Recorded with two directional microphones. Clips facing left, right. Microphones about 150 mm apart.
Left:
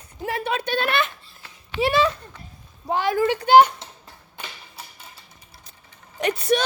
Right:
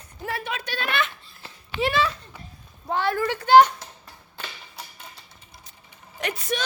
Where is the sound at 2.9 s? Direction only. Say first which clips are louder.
Left 3 dB; 15° left (ahead or behind).